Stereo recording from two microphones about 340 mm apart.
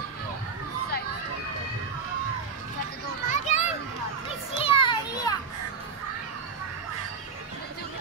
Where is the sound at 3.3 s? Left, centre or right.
Left.